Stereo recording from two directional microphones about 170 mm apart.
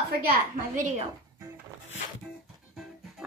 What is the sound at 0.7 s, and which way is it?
Speech, 45° right (ahead or behind).